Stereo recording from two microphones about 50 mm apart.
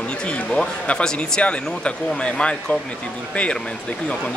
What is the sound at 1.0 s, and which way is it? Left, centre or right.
Speech, centre.